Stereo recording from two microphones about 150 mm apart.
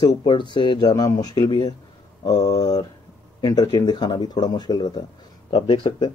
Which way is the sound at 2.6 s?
25° left (ahead or behind).